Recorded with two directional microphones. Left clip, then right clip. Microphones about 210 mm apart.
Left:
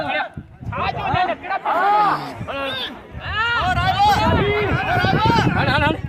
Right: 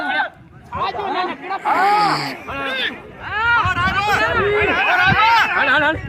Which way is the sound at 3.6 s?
55° left (ahead or behind).